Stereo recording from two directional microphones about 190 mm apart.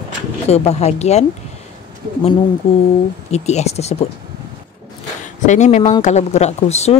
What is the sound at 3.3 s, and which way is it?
Speech, 35° left (ahead or behind).